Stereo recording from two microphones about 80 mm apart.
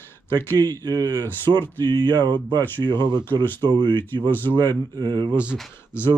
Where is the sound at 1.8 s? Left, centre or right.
Right.